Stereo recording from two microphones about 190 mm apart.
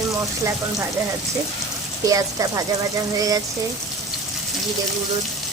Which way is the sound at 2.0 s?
20° right (ahead or behind).